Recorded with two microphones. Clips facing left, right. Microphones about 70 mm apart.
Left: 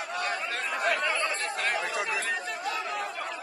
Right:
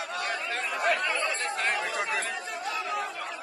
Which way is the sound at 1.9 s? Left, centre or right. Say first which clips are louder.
Even; right.